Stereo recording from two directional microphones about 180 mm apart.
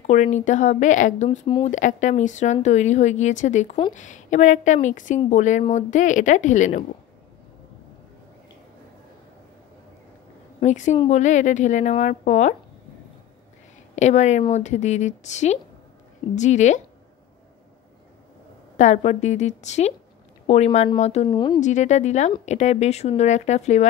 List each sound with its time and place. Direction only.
0.0 s speech: 40° left (ahead or behind)
10.6 s speech: 40° left (ahead or behind)
13.9 s speech: 40° left (ahead or behind)
18.8 s speech: 40° left (ahead or behind)
21.3 s speech: 25° left (ahead or behind)
21.5 s speech: 40° left (ahead or behind)